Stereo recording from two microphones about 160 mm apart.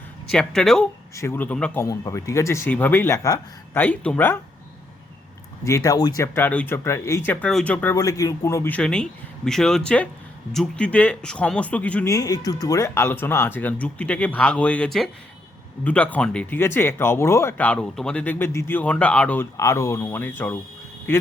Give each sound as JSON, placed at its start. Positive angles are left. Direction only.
{"t": 0.3, "sound": "speech", "side_deg": 5}
{"t": 1.1, "sound": "speech", "side_deg": 15}
{"t": 1.8, "sound": "speech", "side_deg": 20}
{"t": 5.6, "sound": "speech", "side_deg": 20}
{"t": 7.9, "sound": "speech", "side_deg": 20}
{"t": 12.0, "sound": "speech", "side_deg": 20}